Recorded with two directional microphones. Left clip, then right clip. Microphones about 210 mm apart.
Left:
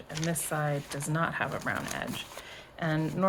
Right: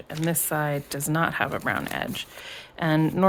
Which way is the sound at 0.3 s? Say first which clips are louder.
Right 5 dB; 45° right (ahead or behind).